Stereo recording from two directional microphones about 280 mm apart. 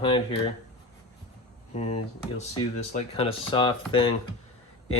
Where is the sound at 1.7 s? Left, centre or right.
Left.